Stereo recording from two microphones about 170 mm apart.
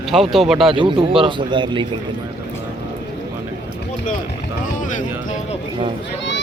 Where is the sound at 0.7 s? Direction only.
30° right (ahead or behind).